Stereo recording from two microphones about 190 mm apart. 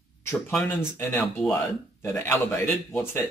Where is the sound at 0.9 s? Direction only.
5° left (ahead or behind).